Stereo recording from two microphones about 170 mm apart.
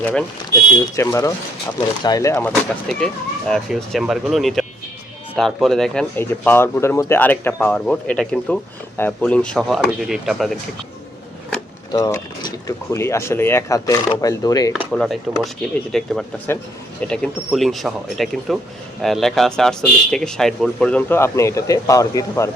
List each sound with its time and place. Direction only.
0.0 s speech: 5° left (ahead or behind)
0.9 s speech: 20° left (ahead or behind)
2.9 s speech: 5° left (ahead or behind)
11.9 s speech: 20° left (ahead or behind)
14.7 s speech: centre (ahead or behind); by 22.4 s 20° left (ahead or behind)